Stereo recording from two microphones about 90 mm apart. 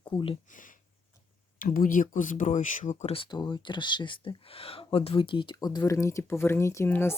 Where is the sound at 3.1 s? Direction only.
60° left (ahead or behind).